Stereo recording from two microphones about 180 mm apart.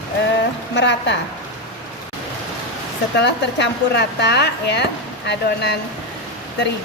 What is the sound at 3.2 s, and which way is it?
A woman's voice, 70° left (ahead or behind).